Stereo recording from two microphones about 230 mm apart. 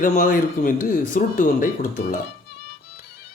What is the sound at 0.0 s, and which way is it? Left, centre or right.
Speech, left.